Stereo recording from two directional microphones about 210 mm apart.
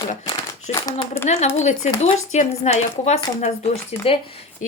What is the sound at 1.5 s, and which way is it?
Speech, 35° left (ahead or behind).